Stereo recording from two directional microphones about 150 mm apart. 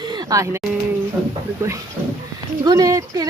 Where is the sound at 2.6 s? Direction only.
25° right (ahead or behind).